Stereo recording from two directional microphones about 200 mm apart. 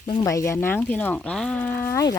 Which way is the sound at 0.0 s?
20° left (ahead or behind).